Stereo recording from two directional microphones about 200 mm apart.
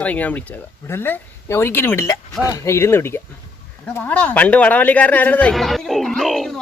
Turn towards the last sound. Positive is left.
turn(degrees=0)  # may be behind; listen again after turning